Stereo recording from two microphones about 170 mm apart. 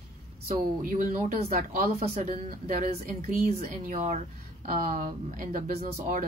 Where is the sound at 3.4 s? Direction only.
45° right (ahead or behind).